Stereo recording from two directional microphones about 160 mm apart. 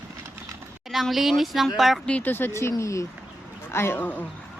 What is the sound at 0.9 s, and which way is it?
A woman's voice, centre (ahead or behind).